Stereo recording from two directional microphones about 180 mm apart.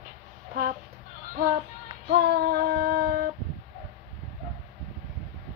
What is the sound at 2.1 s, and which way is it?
Child singing, 65° right (ahead or behind).